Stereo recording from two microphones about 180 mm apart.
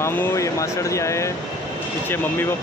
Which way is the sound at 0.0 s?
15° left (ahead or behind).